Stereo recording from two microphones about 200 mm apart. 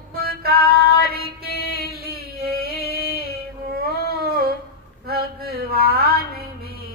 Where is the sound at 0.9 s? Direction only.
50° right (ahead or behind).